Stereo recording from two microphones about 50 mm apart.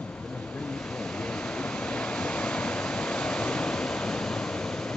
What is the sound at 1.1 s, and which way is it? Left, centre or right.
Waves, centre.